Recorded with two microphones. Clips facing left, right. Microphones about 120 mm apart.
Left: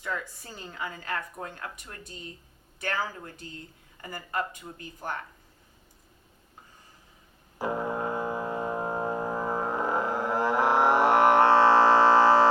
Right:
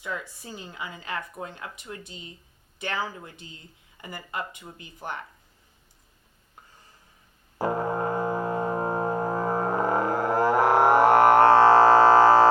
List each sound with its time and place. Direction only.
0.0 s a woman's voice: 15° right (ahead or behind)
7.6 s music: 35° right (ahead or behind)